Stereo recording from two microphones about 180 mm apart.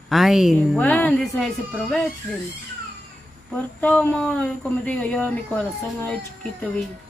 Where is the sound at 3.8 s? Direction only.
10° left (ahead or behind).